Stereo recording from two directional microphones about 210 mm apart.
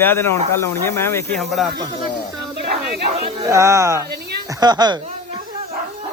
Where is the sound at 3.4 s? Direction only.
15° right (ahead or behind).